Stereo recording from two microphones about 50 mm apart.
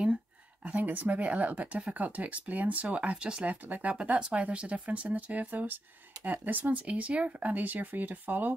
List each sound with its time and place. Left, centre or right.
0.7 s speech: right
3.4 s speech: right
3.9 s speech: right